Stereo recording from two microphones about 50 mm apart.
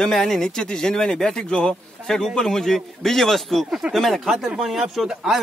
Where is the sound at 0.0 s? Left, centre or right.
Centre.